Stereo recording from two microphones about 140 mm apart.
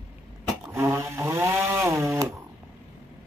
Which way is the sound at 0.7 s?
20° right (ahead or behind).